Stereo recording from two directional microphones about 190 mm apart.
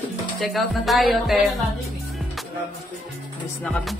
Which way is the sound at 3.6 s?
5° left (ahead or behind).